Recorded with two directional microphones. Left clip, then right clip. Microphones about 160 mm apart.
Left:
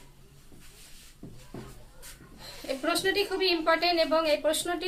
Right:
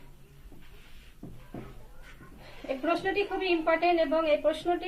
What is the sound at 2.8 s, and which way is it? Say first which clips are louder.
A woman's voice: left 1 dB; 15° left (ahead or behind).